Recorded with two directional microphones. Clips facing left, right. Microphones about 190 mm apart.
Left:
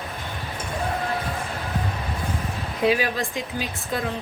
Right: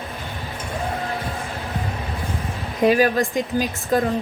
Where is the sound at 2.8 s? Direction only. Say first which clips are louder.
Right 5 dB; 45° right (ahead or behind).